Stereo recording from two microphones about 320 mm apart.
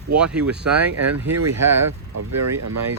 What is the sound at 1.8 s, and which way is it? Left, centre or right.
Speech, right.